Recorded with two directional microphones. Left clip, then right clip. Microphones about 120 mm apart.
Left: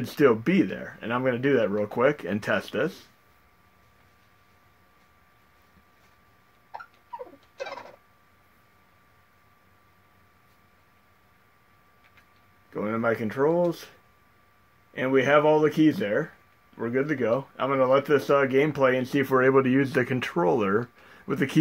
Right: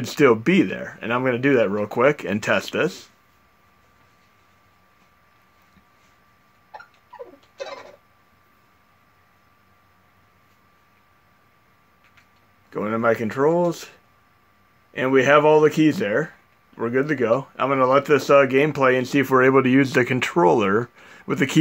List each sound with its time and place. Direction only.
0.0 s speech: 50° right (ahead or behind)
12.6 s speech: 55° right (ahead or behind)
14.9 s speech: 60° right (ahead or behind)